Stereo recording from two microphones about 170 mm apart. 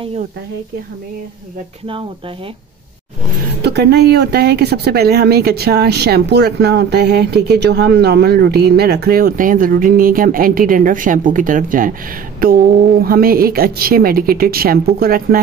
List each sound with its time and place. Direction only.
3.6 s a woman's voice: 75° right (ahead or behind)